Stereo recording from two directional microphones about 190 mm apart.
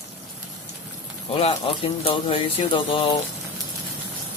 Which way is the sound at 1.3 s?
30° left (ahead or behind).